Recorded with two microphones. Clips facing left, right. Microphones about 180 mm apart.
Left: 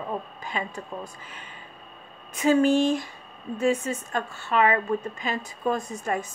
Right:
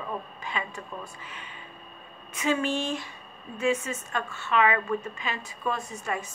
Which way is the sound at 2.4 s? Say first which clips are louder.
Left 8 dB; 40° left (ahead or behind).